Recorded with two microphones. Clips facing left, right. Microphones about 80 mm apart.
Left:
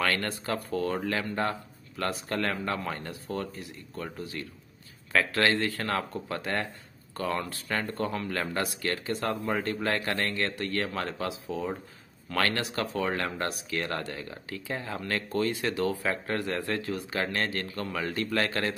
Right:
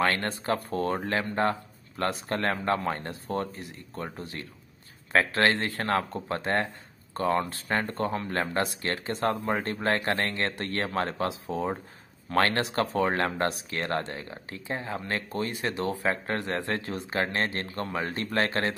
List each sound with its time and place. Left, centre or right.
0.0 s speech: right